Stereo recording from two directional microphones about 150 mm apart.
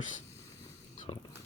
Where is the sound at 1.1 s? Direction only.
40° left (ahead or behind).